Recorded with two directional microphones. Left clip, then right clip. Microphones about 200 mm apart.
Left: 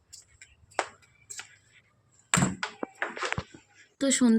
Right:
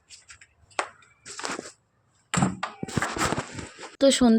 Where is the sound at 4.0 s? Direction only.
25° right (ahead or behind).